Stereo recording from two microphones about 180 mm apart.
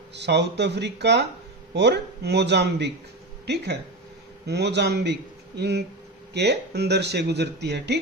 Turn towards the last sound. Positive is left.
turn(degrees=-70)  # may be behind; listen again after turning